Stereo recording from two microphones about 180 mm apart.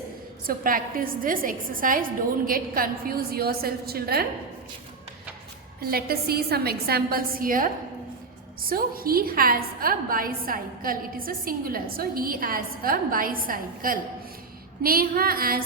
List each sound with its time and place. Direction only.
0.4 s a woman's voice: 50° right (ahead or behind)
5.8 s a woman's voice: 55° right (ahead or behind)